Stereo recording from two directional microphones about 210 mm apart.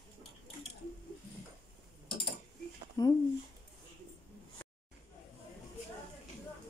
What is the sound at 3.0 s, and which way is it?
Speech, 15° left (ahead or behind).